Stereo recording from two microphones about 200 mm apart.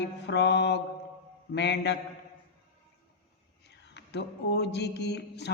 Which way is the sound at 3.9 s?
60° left (ahead or behind).